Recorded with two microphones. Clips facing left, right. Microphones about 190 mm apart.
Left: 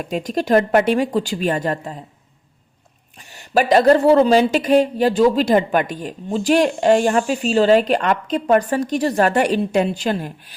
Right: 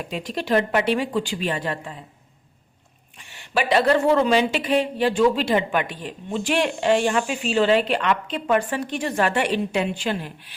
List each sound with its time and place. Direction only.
0.0 s speech: 45° left (ahead or behind)
3.2 s speech: 40° left (ahead or behind)